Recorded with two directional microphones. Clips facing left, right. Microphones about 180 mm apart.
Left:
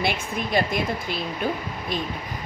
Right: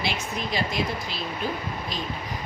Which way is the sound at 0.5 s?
55° left (ahead or behind).